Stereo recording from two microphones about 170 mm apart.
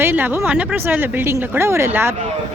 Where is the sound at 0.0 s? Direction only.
10° right (ahead or behind).